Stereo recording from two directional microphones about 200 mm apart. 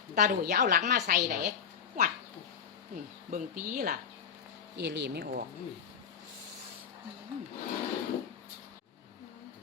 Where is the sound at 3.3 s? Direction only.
45° right (ahead or behind).